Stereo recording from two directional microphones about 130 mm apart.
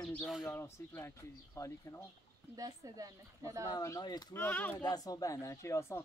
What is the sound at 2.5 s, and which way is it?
A woman's voice, 30° right (ahead or behind).